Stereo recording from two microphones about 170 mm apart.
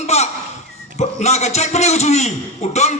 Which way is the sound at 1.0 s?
40° left (ahead or behind).